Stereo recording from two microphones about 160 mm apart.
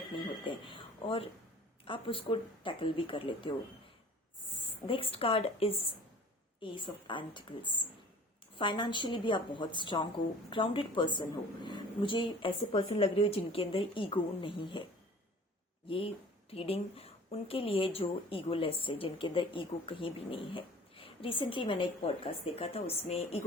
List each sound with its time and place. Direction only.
0.4 s a woman's voice: 30° left (ahead or behind)
4.9 s a woman's voice: 35° left (ahead or behind)
15.9 s a woman's voice: 35° left (ahead or behind)